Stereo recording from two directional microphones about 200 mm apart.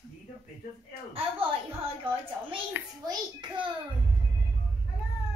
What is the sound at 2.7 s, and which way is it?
A child's voice, 20° right (ahead or behind).